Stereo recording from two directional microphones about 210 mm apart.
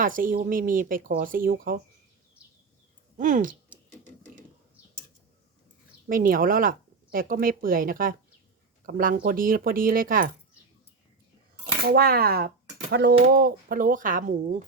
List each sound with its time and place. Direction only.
0.0 s speech: 40° right (ahead or behind)
3.2 s speech: 40° right (ahead or behind)
6.1 s speech: 40° right (ahead or behind)
11.9 s speech: 45° right (ahead or behind)